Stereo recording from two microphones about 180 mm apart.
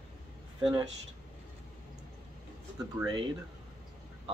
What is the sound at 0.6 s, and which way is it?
Speech, 25° right (ahead or behind).